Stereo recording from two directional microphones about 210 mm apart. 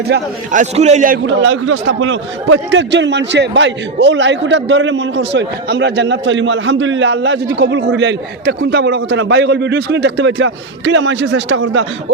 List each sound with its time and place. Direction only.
0.5 s a man's voice: 35° right (ahead or behind)
1.3 s a man's voice: 65° right (ahead or behind)